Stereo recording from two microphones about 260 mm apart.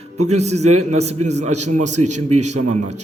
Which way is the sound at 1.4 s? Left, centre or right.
Right.